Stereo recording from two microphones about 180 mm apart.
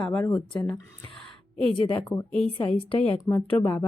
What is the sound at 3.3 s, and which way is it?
Speech, 10° left (ahead or behind).